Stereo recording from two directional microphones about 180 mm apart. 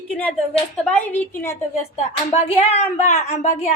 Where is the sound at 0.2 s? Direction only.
5° left (ahead or behind).